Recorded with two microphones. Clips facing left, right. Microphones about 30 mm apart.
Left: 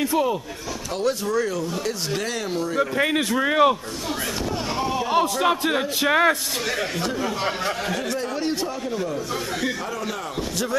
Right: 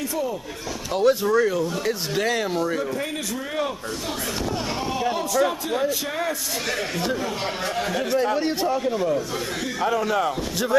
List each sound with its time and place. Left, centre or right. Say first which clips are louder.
0.9 s speech: right 4 dB; centre
3.0 s a man's voice: left 7 dB; left
4.8 s speech: right 2 dB; centre
5.1 s a man's voice: left 5 dB; left
7.0 s speech: even; centre